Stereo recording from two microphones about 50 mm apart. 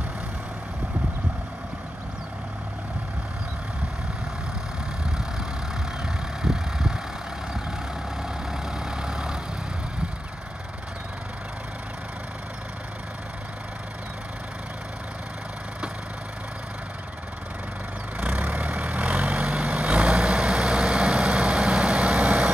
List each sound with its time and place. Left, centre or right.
6.0 s vehicle: centre
8.2 s vehicle: centre
18.2 s vehicle: right